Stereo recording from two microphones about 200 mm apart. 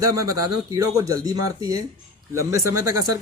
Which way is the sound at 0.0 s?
15° right (ahead or behind).